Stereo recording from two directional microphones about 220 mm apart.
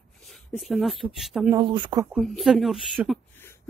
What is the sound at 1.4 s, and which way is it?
Speech, 20° right (ahead or behind).